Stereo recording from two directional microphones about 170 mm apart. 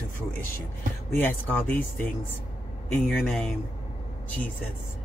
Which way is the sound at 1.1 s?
10° left (ahead or behind).